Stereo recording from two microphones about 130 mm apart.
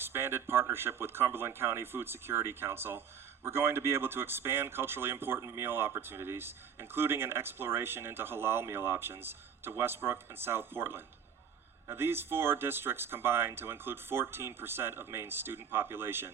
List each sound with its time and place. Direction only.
0.0 s speech: 20° right (ahead or behind)